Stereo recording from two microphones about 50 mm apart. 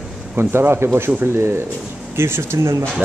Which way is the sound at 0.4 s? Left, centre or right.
Right.